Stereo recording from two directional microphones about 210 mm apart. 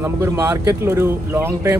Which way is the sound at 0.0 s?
10° right (ahead or behind).